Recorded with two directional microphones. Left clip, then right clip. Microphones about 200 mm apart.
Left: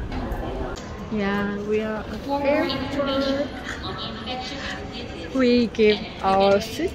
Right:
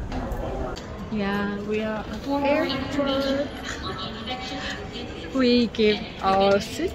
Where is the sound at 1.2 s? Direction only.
5° left (ahead or behind).